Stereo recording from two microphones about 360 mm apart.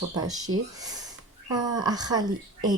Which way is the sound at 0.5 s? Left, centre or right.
Right.